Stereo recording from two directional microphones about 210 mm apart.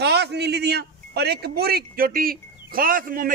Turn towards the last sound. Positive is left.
turn(degrees=-40)  # may be behind; listen again after turning